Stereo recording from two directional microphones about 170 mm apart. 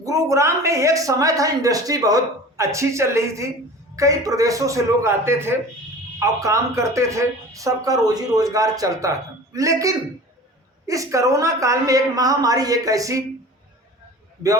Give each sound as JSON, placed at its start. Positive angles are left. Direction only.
{"t": 0.0, "sound": "speech", "side_deg": -20}